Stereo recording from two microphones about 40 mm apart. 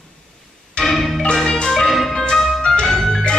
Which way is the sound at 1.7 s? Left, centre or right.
Centre.